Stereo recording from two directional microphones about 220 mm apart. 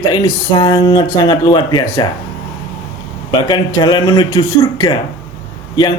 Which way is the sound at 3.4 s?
20° left (ahead or behind).